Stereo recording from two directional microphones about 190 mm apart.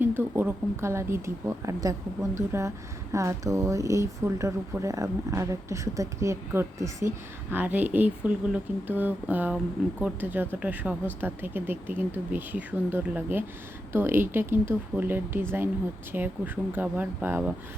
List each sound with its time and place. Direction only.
0.0 s speech: 10° right (ahead or behind)